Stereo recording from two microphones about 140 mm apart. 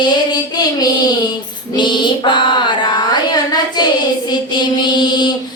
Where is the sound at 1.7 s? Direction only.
35° left (ahead or behind).